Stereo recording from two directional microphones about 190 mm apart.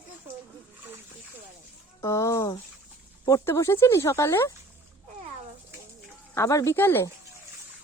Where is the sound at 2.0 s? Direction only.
15° left (ahead or behind).